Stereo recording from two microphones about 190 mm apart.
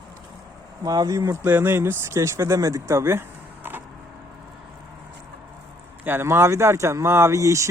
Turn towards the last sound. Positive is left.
turn(degrees=-15)  # may be behind; listen again after turning